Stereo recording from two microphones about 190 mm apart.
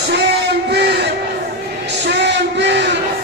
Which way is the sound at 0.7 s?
60° right (ahead or behind).